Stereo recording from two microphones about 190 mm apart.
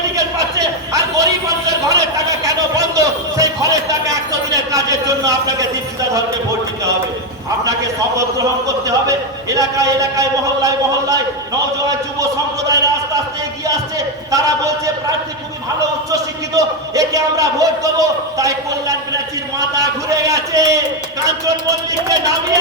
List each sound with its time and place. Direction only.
0.2 s a sound: 20° right (ahead or behind)
7.6 s a man's voice: 20° right (ahead or behind)
12.6 s a man's voice: 20° right (ahead or behind)
14.3 s a man's voice: 15° right (ahead or behind)
16.1 s a man's voice: 20° right (ahead or behind)